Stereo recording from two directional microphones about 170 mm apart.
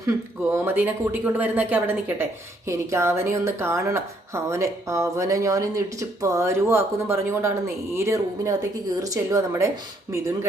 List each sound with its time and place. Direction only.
0.5 s speech: 10° right (ahead or behind)